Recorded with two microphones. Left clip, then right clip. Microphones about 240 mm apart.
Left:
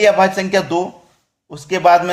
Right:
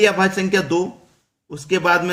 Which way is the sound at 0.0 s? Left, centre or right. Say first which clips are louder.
Left 4 dB; centre.